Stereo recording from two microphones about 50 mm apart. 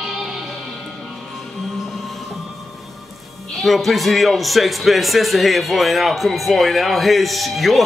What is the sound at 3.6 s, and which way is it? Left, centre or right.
Speech, centre.